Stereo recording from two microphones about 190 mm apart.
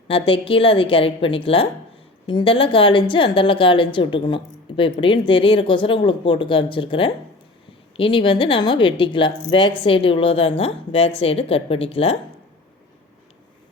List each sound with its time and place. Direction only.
0.1 s a woman's voice: 30° left (ahead or behind)